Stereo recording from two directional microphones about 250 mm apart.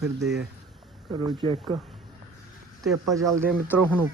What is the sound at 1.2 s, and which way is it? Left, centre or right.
Speech, right.